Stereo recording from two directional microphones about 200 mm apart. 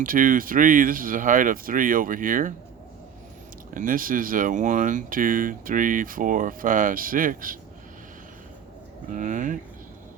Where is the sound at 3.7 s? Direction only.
40° right (ahead or behind).